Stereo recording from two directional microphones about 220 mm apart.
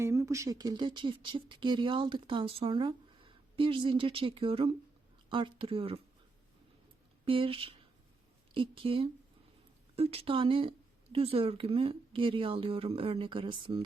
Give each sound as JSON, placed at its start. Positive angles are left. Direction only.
{"t": 0.0, "sound": "speech", "side_deg": -15}
{"t": 7.3, "sound": "speech", "side_deg": -25}